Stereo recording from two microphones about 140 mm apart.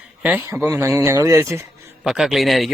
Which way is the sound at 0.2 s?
10° right (ahead or behind).